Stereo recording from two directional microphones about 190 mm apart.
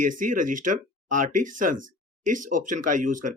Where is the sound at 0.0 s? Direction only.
45° right (ahead or behind).